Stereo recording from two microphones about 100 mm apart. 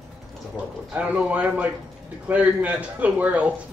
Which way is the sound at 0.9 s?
15° right (ahead or behind).